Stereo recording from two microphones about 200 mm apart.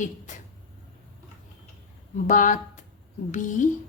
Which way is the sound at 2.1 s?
40° left (ahead or behind).